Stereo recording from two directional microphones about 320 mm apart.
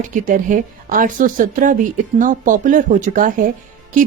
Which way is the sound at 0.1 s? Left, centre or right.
Right.